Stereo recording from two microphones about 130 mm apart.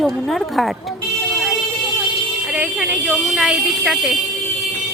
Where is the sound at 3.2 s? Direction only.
5° right (ahead or behind).